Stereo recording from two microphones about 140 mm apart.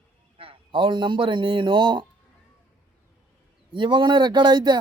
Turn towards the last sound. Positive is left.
turn(degrees=-35)  # may be behind; listen again after turning